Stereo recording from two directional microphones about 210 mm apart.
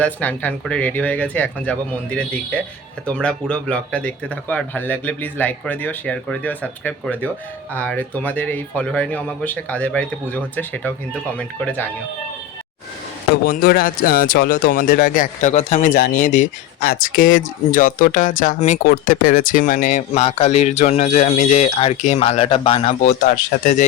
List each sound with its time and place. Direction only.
0.0 s speech: 5° left (ahead or behind)
13.3 s speech: 45° left (ahead or behind)